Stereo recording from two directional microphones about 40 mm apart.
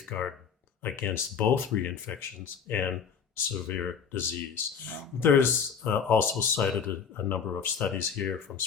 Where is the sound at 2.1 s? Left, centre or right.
Left.